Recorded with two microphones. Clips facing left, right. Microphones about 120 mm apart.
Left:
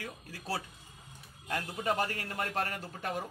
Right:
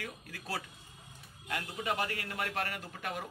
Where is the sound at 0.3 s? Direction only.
30° left (ahead or behind).